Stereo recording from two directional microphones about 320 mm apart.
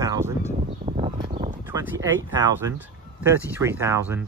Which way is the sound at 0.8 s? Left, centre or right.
Right.